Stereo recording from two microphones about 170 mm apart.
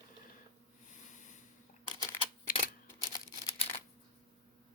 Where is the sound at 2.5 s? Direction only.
55° left (ahead or behind).